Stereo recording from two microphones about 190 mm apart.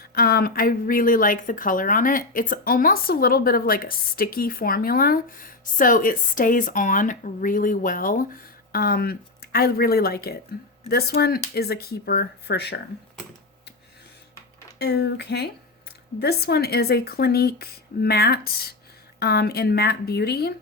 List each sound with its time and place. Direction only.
0.0 s a woman's voice: 55° left (ahead or behind)
14.8 s speech: 60° left (ahead or behind)